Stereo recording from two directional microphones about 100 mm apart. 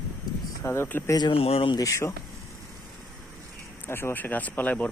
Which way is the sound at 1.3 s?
75° left (ahead or behind).